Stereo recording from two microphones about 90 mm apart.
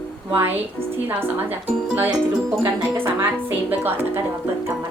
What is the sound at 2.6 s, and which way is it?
Speech, 30° right (ahead or behind).